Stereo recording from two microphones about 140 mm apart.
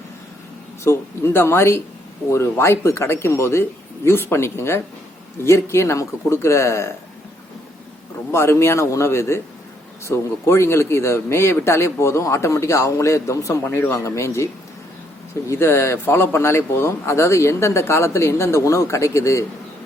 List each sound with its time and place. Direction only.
0.9 s a man's voice: 15° left (ahead or behind)
8.3 s speech: 20° left (ahead or behind)
15.4 s speech: 15° left (ahead or behind)